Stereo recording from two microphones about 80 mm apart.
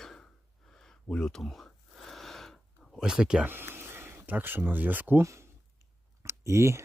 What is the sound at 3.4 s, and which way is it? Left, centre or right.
Speech, right.